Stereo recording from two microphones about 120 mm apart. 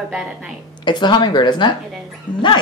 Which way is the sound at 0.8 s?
40° left (ahead or behind).